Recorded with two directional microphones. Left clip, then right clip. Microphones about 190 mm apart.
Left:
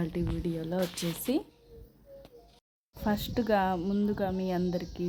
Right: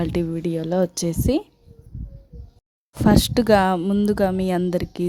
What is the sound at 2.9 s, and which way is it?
Speech, 65° right (ahead or behind).